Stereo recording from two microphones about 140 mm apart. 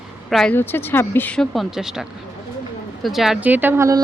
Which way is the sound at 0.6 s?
15° left (ahead or behind).